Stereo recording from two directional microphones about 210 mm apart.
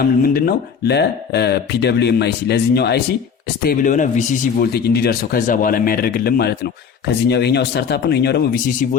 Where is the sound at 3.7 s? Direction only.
40° left (ahead or behind).